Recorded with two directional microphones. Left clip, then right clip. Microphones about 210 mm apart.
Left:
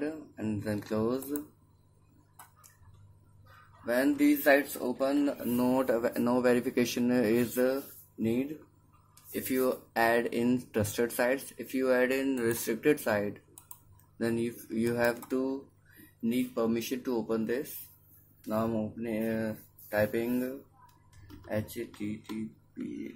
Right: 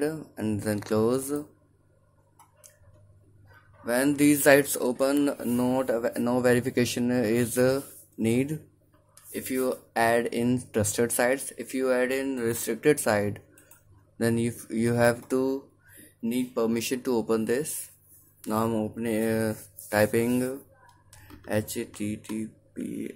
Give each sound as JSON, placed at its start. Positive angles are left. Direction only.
{"t": 0.0, "sound": "speech", "side_deg": -25}
{"t": 3.8, "sound": "speech", "side_deg": -20}
{"t": 4.2, "sound": "speech", "side_deg": -35}
{"t": 5.6, "sound": "speech", "side_deg": -5}
{"t": 9.1, "sound": "speech", "side_deg": -10}